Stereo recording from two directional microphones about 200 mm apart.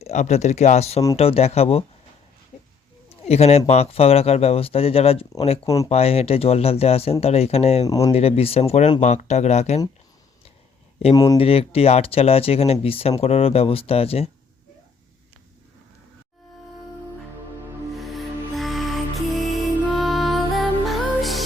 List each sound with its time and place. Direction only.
0.0 s speech: 35° left (ahead or behind)
3.1 s a sound: 30° left (ahead or behind)
3.7 s speech: 30° left (ahead or behind)
5.6 s speech: 15° left (ahead or behind)
5.9 s speech: 30° left (ahead or behind)
7.9 s speech: 15° left (ahead or behind)
8.1 s speech: 30° left (ahead or behind)
11.1 s speech: 20° left (ahead or behind)
17.9 s music: centre (ahead or behind)